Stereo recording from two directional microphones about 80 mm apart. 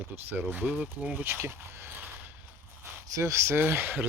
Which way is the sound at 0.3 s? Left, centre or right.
Right.